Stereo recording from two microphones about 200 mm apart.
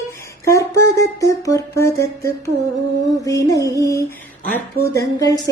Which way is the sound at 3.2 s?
15° left (ahead or behind).